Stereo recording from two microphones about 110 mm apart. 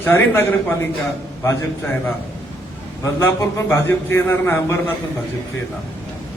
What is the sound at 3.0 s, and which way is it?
A man's voice, 25° left (ahead or behind).